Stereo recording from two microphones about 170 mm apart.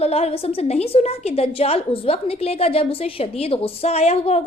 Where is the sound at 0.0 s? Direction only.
35° left (ahead or behind).